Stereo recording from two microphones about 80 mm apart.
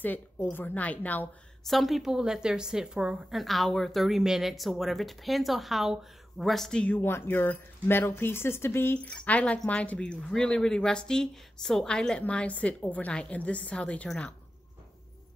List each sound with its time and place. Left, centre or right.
0.0 s a woman's voice: left
1.6 s a woman's voice: centre
6.9 s a woman's voice: left
8.9 s speech: centre